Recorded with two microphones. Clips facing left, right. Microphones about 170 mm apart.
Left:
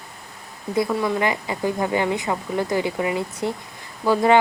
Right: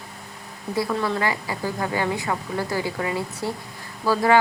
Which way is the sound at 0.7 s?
15° left (ahead or behind).